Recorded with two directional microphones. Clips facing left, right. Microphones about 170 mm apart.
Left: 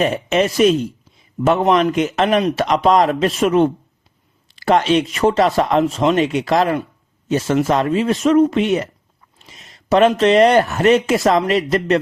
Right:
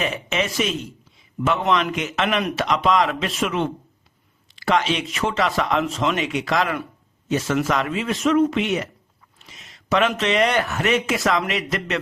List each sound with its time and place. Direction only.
0.0 s speech: 40° left (ahead or behind)